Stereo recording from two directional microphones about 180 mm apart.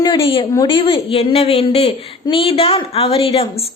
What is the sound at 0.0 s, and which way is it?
A woman's voice, 25° left (ahead or behind).